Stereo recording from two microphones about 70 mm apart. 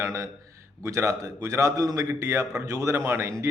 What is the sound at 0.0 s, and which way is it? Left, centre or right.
A man's voice, right.